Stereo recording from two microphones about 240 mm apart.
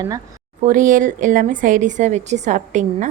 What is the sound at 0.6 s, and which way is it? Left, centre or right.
Speech, right.